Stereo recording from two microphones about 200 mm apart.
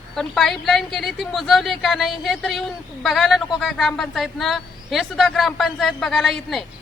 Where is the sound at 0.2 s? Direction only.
Centre (ahead or behind).